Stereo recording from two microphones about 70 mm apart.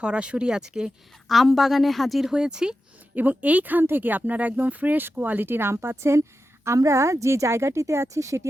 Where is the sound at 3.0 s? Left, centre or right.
Right.